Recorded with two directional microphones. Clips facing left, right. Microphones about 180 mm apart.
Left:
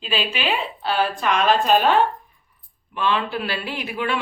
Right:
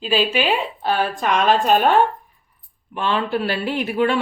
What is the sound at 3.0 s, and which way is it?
A woman's voice, 40° right (ahead or behind).